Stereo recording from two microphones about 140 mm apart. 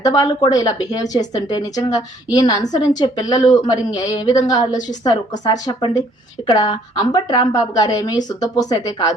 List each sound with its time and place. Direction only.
0.0 s a woman's voice: 25° left (ahead or behind)